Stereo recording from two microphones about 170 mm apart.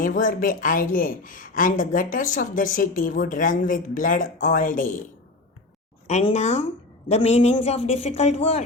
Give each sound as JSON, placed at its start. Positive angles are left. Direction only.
{"t": 0.0, "sound": "a woman's voice", "side_deg": 50}
{"t": 6.1, "sound": "speech", "side_deg": 40}